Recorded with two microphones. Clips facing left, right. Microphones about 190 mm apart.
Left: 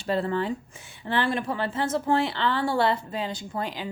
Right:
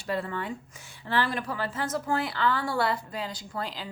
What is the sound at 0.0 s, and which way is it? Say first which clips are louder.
Speech: left 5 dB; 30° left (ahead or behind).